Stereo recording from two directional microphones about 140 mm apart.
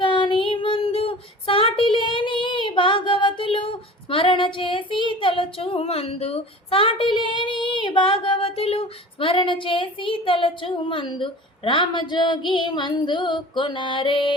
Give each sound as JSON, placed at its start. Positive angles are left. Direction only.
{"t": 0.0, "sound": "child singing", "side_deg": 35}